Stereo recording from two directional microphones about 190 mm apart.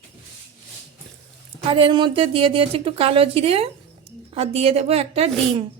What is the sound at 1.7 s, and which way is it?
A woman's voice, 30° right (ahead or behind).